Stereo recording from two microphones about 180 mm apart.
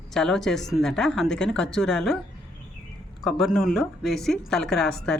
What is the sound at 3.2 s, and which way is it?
Speech, centre (ahead or behind).